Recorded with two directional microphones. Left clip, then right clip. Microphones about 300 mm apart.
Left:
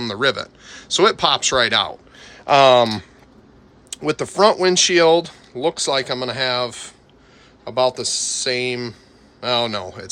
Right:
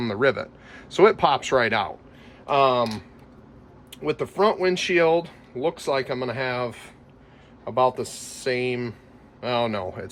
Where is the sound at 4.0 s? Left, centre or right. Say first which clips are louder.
Left 6 dB; centre.